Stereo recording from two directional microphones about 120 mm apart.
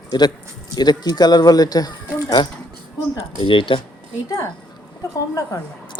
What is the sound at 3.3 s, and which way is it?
Speech, 45° left (ahead or behind).